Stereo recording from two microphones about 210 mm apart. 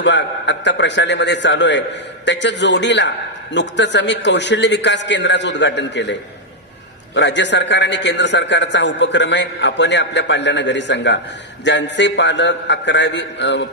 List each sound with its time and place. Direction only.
0.0 s a man's voice: 60° left (ahead or behind)
7.2 s a man's voice: 55° left (ahead or behind)